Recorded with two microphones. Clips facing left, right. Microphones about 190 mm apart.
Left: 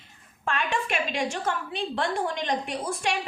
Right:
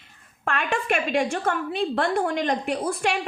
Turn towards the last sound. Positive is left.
turn(degrees=-60)  # may be behind; listen again after turning